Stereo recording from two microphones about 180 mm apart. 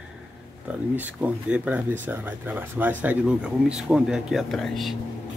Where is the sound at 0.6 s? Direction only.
10° right (ahead or behind).